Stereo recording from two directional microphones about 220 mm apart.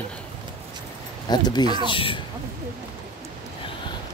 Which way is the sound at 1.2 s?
20° left (ahead or behind).